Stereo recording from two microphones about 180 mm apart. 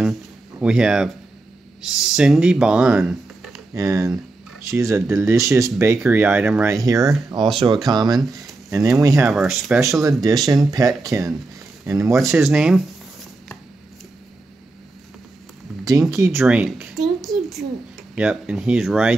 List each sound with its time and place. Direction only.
0.6 s speech: 5° right (ahead or behind)
3.7 s speech: 20° right (ahead or behind)
9.3 s speech: centre (ahead or behind)
10.0 s speech: 20° right (ahead or behind)
12.4 s speech: 5° right (ahead or behind)
15.9 s speech: 15° right (ahead or behind)
16.3 s a sound: 5° right (ahead or behind)
18.1 s speech: 5° right (ahead or behind)